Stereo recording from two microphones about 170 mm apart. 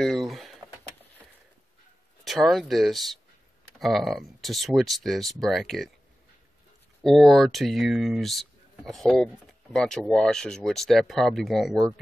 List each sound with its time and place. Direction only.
0.0 s speech: centre (ahead or behind)
2.2 s speech: centre (ahead or behind)
7.0 s speech: centre (ahead or behind)